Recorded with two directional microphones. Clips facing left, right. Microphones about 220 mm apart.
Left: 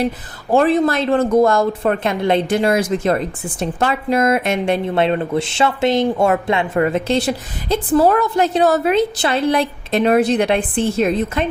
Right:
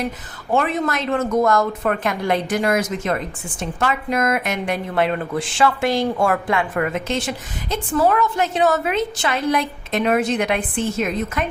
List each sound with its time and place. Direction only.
0.5 s a woman's voice: 35° left (ahead or behind)